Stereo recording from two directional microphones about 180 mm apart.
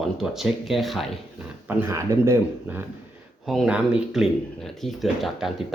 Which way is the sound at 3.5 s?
Centre (ahead or behind).